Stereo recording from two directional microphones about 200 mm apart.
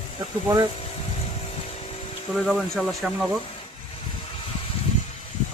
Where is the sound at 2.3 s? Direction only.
Centre (ahead or behind).